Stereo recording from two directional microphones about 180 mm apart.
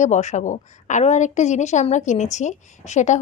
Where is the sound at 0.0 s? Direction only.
40° left (ahead or behind).